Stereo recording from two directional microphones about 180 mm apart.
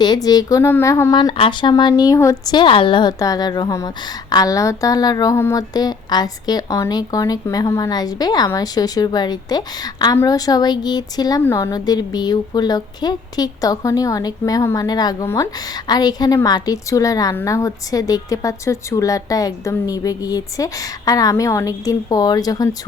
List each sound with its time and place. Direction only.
0.0 s a woman's voice: 20° left (ahead or behind)